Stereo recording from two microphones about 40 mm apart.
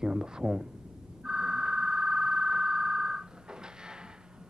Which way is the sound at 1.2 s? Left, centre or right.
Centre.